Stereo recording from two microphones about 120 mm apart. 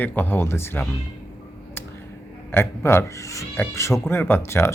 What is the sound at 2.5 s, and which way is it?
Speech, 20° left (ahead or behind).